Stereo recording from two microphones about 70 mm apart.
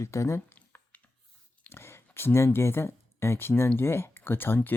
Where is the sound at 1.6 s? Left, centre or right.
Left.